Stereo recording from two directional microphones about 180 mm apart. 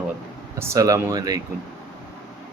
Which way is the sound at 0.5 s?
15° right (ahead or behind).